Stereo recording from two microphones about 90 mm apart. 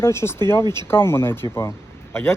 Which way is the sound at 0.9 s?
25° left (ahead or behind).